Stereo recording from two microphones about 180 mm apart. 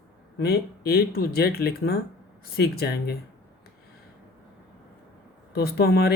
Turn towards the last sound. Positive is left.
turn(degrees=60)  # may be behind; listen again after turning